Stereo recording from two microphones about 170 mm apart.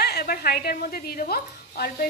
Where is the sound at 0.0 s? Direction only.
60° left (ahead or behind).